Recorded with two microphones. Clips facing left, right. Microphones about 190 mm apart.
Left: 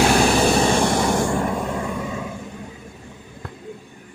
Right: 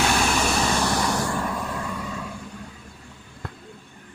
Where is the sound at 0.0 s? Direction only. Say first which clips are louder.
Left 6 dB; 35° left (ahead or behind).